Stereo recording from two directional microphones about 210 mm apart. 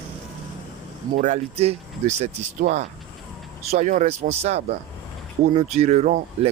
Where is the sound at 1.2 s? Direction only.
30° right (ahead or behind).